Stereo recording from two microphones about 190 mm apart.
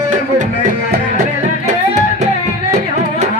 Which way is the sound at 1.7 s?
40° right (ahead or behind).